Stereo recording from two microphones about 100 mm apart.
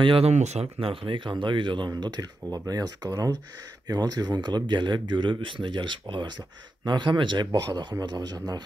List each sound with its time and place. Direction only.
0.0 s speech: 75° right (ahead or behind); by 7.4 s 50° right (ahead or behind)
7.5 s speech: 40° right (ahead or behind)